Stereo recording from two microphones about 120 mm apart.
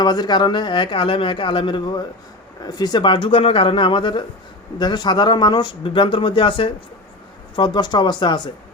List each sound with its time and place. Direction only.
0.0 s speech: 35° left (ahead or behind)